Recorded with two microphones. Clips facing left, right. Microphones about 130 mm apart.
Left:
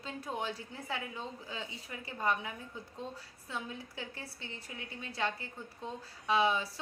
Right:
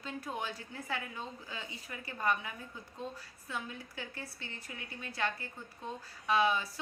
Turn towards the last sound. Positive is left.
turn(degrees=25)  # may be behind; listen again after turning